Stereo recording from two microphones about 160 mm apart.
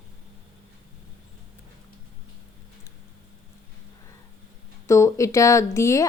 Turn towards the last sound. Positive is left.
turn(degrees=20)  # may be behind; listen again after turning